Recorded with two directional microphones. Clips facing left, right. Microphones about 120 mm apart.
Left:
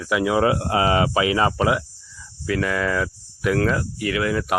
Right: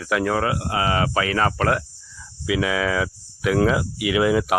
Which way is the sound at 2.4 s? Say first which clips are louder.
Right 1 dB; 5° right (ahead or behind).